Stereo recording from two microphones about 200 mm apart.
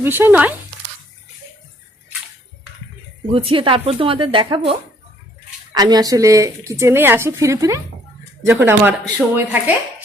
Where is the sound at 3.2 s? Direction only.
30° right (ahead or behind).